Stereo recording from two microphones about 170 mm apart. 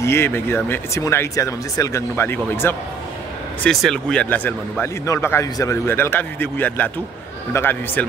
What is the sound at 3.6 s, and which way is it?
Speech, 5° left (ahead or behind).